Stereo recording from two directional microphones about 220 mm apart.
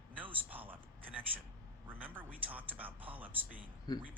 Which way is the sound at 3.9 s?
20° left (ahead or behind).